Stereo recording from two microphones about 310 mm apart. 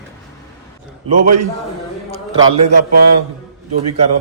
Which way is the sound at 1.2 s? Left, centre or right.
Right.